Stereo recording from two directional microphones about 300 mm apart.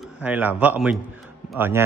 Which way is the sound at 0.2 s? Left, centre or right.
Centre.